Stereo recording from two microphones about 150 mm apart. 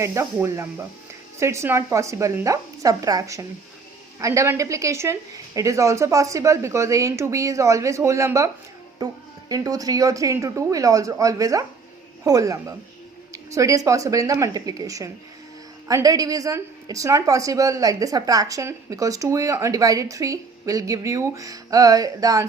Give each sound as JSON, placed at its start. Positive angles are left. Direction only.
{"t": 0.0, "sound": "speech", "side_deg": -20}
{"t": 9.5, "sound": "speech", "side_deg": -25}